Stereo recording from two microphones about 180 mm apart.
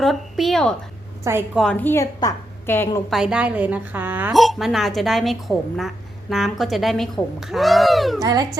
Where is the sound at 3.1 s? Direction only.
5° right (ahead or behind).